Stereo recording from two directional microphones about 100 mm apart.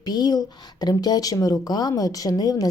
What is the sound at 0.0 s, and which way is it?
Speech, 45° left (ahead or behind).